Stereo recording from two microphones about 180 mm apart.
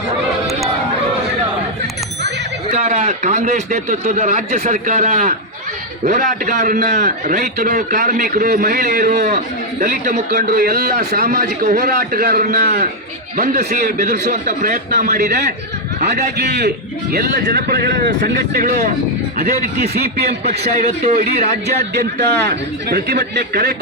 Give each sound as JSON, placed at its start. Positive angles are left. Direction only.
{"t": 2.7, "sound": "a man's voice", "side_deg": -40}
{"t": 6.9, "sound": "a man's voice", "side_deg": -45}
{"t": 13.7, "sound": "a man's voice", "side_deg": -45}
{"t": 16.4, "sound": "a man's voice", "side_deg": -65}
{"t": 18.5, "sound": "a man's voice", "side_deg": -50}
{"t": 20.4, "sound": "a man's voice", "side_deg": -40}
{"t": 22.4, "sound": "speech", "side_deg": -65}